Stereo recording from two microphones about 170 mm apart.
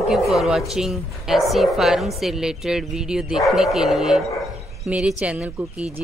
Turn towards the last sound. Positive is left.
turn(degrees=-10)  # may be behind; listen again after turning